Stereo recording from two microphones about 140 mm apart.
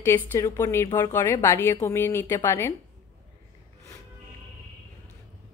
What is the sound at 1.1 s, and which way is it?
A woman's voice, 15° left (ahead or behind).